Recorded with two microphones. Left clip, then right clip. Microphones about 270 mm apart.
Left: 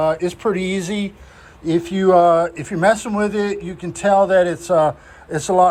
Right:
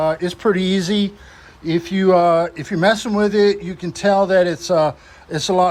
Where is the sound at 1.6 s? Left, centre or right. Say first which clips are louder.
Left 1 dB; right.